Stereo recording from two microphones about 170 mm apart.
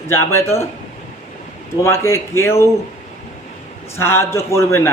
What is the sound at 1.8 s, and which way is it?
Speech, 15° left (ahead or behind).